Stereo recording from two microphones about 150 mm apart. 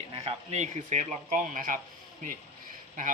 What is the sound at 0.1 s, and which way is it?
Speech, 45° right (ahead or behind).